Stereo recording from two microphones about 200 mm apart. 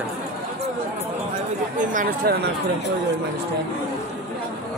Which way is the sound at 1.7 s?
40° right (ahead or behind).